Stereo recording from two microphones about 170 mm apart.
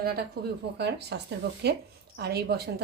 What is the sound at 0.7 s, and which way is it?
Speech, 80° right.